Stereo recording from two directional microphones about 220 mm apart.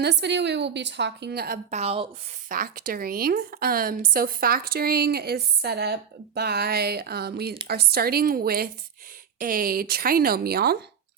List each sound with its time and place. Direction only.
0.0 s a woman's voice: 50° right (ahead or behind)
1.7 s speech: 25° right (ahead or behind)
2.5 s a woman's voice: 40° right (ahead or behind)